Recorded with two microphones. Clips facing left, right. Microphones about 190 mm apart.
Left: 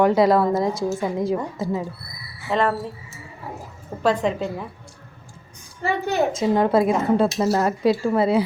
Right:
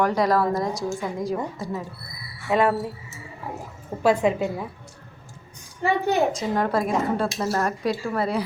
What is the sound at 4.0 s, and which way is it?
Speech, 10° right (ahead or behind).